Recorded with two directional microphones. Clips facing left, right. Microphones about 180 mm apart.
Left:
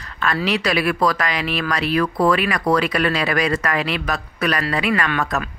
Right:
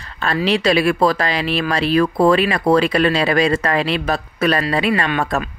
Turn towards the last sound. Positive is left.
turn(degrees=-30)  # may be behind; listen again after turning